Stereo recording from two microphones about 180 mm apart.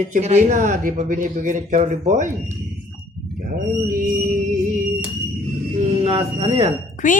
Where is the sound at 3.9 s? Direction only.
50° right (ahead or behind).